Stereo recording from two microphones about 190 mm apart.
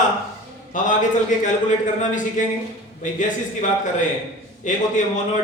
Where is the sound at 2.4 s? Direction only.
40° left (ahead or behind).